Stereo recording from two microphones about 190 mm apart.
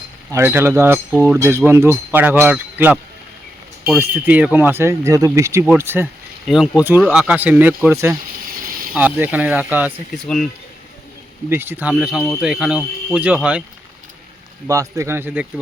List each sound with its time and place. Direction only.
0.3 s speech: 15° right (ahead or behind)
8.6 s a sound: 50° right (ahead or behind)
8.9 s speech: 10° right (ahead or behind)
11.4 s speech: 10° right (ahead or behind)
14.7 s speech: 15° right (ahead or behind)